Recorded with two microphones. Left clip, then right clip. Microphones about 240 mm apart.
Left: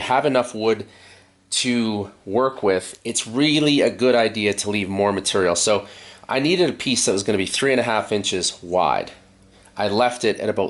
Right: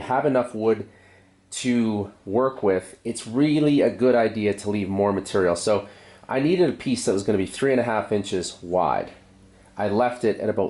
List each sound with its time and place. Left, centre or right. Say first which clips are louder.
0.0 s speech: left 3 dB; centre
1.8 s speech: left 1 dB; right
2.6 s speech: left 2 dB; centre